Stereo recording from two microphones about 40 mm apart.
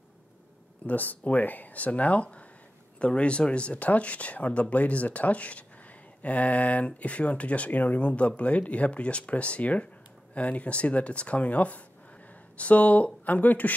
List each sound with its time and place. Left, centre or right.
0.8 s speech: left
8.1 s speech: left